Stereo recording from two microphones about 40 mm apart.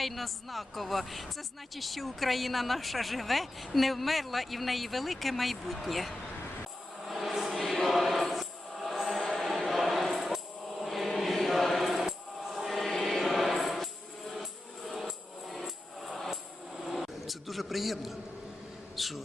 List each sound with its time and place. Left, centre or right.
0.0 s a man's voice: centre
7.0 s music: centre
16.0 s music: centre
16.8 s a sound: centre